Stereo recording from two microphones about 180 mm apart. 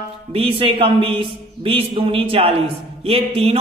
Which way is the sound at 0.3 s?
30° right (ahead or behind).